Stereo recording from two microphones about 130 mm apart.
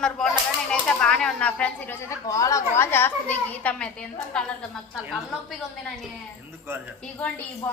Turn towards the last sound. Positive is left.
turn(degrees=15)  # may be behind; listen again after turning